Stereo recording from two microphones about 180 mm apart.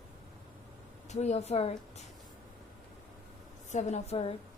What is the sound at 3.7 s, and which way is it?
Speech, 35° left (ahead or behind).